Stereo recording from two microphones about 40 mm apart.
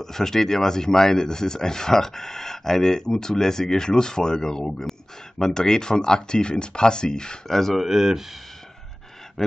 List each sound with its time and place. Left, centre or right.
0.0 s speech: centre
7.4 s speech: centre
7.8 s speech: centre